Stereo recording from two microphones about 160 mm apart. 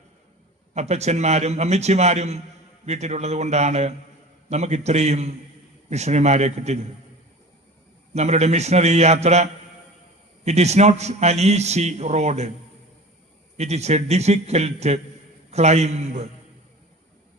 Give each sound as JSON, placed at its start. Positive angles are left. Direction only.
{"t": 0.7, "sound": "a man's voice", "side_deg": -45}
{"t": 8.1, "sound": "a man's voice", "side_deg": -45}
{"t": 13.6, "sound": "a man's voice", "side_deg": -45}